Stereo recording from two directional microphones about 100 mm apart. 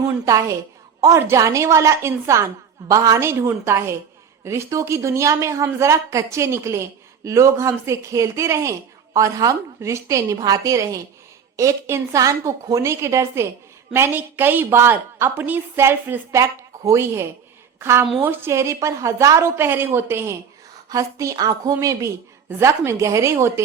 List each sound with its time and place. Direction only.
0.3 s a woman's voice: 35° right (ahead or behind)
16.3 s a woman's voice: 30° right (ahead or behind)